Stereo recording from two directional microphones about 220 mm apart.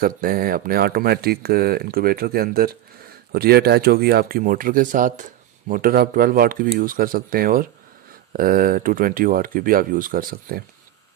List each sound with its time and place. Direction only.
0.0 s speech: 40° right (ahead or behind)